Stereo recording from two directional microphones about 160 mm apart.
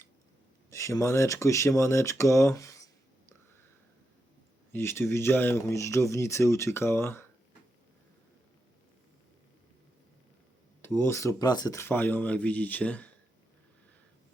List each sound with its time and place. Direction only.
0.7 s speech: 20° left (ahead or behind)
4.7 s speech: 15° left (ahead or behind)
10.8 s speech: 15° left (ahead or behind)